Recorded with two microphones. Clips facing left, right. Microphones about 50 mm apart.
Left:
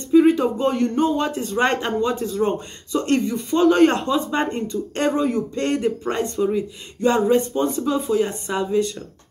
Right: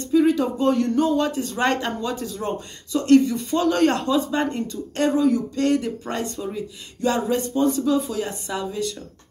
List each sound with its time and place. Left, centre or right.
0.1 s speech: left
6.3 s speech: centre
7.0 s a sound: left
7.8 s speech: left